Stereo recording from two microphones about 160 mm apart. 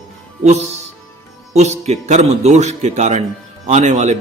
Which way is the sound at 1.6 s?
45° right (ahead or behind).